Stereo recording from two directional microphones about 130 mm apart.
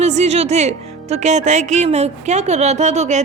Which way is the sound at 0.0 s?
60° right (ahead or behind).